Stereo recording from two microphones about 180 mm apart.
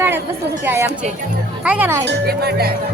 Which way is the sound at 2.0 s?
65° right (ahead or behind).